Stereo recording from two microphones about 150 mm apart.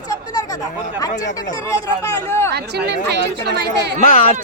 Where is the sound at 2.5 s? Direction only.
90° right.